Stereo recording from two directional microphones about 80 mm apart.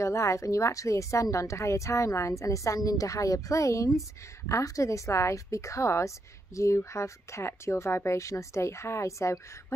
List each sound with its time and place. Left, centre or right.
0.0 s speech: left